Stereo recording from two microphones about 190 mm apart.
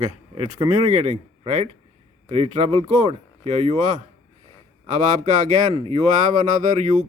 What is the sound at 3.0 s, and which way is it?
Speech, 35° right (ahead or behind).